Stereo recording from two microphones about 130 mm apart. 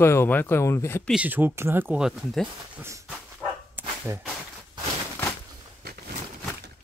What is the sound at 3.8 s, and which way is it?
Whip, 15° right (ahead or behind).